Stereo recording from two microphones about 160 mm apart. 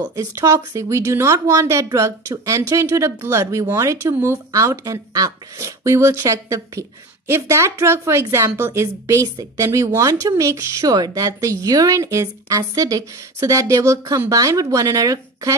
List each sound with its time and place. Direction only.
0.0 s a woman's voice: 20° right (ahead or behind)